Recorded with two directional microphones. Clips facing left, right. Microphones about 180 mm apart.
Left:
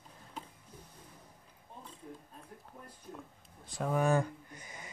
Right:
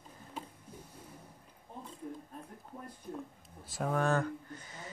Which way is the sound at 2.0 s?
45° right (ahead or behind).